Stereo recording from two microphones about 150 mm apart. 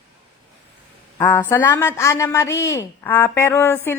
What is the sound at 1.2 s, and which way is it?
A woman's voice, 15° left (ahead or behind).